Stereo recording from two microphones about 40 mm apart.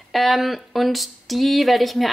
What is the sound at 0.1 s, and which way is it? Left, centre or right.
Speech, centre.